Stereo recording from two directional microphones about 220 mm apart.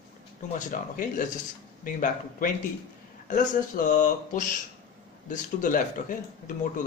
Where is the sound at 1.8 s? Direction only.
40° left (ahead or behind).